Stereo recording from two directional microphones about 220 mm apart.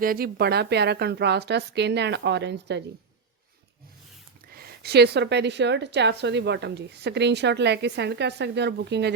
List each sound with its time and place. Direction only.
0.0 s a woman's voice: 40° right (ahead or behind)
4.5 s a woman's voice: 45° right (ahead or behind)